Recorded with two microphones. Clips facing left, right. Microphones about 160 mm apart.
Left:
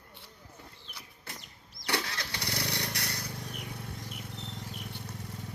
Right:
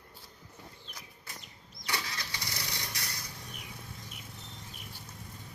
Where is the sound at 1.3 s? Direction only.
60° left (ahead or behind).